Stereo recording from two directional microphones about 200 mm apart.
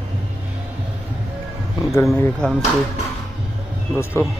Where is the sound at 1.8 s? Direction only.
15° left (ahead or behind).